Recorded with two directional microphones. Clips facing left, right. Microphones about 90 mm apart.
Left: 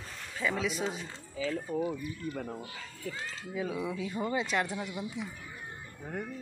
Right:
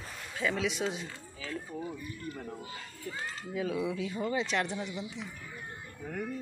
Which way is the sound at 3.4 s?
5° left (ahead or behind).